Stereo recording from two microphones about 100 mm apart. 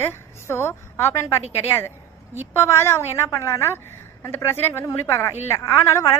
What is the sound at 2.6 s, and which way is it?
A woman's voice, 25° left (ahead or behind).